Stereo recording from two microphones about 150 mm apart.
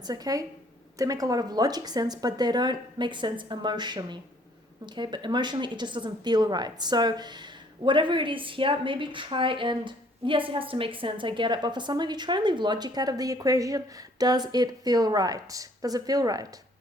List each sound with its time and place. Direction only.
0.1 s a woman's voice: 25° right (ahead or behind)